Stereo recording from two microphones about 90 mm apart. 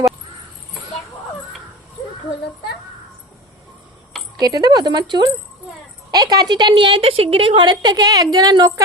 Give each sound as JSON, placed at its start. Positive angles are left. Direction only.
{"t": 4.4, "sound": "a woman's voice", "side_deg": -45}
{"t": 7.6, "sound": "a woman's voice", "side_deg": -55}